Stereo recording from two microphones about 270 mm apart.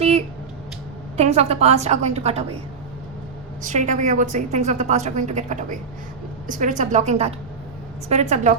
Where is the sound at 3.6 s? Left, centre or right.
Right.